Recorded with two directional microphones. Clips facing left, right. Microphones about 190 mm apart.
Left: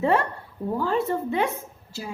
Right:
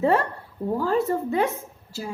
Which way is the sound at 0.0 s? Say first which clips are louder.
Right 1 dB; 40° right (ahead or behind).